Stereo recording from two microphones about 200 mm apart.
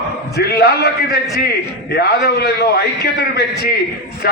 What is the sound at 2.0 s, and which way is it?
A man's voice, 55° left (ahead or behind).